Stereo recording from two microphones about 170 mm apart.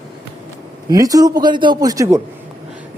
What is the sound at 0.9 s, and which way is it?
A man's voice, 20° right (ahead or behind).